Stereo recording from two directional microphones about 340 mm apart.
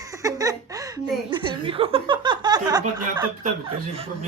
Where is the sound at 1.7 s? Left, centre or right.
Centre.